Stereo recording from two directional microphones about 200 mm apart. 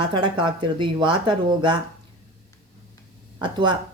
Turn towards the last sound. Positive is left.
turn(degrees=-25)  # may be behind; listen again after turning